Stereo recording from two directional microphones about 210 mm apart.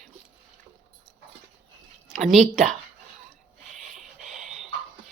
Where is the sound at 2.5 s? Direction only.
35° right (ahead or behind).